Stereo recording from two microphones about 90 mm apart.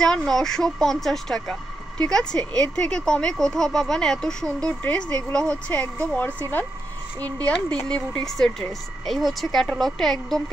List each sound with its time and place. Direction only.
0.0 s speech: 5° left (ahead or behind)